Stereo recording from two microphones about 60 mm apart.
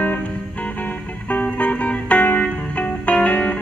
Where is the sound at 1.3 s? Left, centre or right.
Left.